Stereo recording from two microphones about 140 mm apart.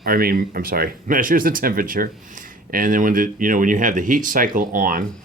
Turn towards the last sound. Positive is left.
turn(degrees=-80)